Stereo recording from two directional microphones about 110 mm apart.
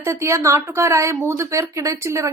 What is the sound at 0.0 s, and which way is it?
Speech, 25° right (ahead or behind).